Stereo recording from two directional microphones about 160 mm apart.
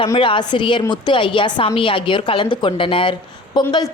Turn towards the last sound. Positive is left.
turn(degrees=25)  # may be behind; listen again after turning